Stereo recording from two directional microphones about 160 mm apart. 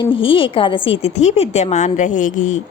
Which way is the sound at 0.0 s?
35° left (ahead or behind).